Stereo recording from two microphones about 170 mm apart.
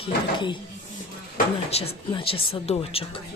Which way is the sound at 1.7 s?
35° left (ahead or behind).